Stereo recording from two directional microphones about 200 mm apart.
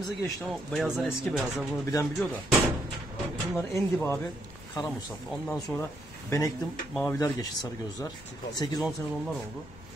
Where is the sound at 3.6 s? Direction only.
10° left (ahead or behind).